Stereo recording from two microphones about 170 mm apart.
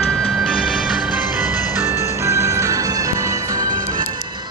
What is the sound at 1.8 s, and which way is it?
Music, 15° right (ahead or behind).